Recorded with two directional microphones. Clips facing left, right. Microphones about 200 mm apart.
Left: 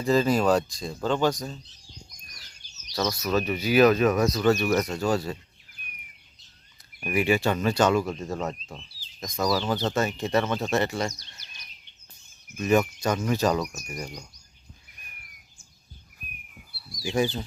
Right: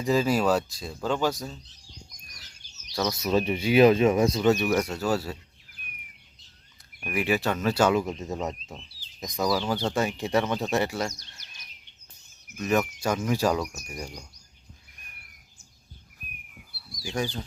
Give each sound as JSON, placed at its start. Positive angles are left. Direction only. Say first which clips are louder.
{"t": 0.0, "sound": "speech", "louder": "left 1 dB", "side_deg": -10}
{"t": 3.2, "sound": "speech", "louder": "right 4 dB", "side_deg": -25}
{"t": 7.0, "sound": "speech", "louder": "left 3 dB", "side_deg": 0}
{"t": 7.9, "sound": "speech", "louder": "left 1 dB", "side_deg": -20}
{"t": 12.5, "sound": "speech", "louder": "left 3 dB", "side_deg": 0}
{"t": 17.0, "sound": "speech", "louder": "left 5 dB", "side_deg": 5}